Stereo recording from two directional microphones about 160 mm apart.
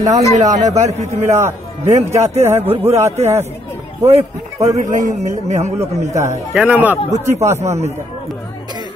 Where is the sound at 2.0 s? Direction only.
20° right (ahead or behind).